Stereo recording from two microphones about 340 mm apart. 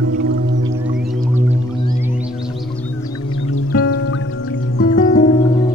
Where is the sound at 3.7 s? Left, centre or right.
Left.